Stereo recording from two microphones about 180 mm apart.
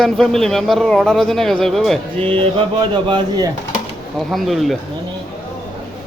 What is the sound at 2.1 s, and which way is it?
Mantra, 30° right (ahead or behind).